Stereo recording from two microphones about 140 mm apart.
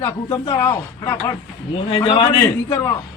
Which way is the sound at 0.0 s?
25° left (ahead or behind).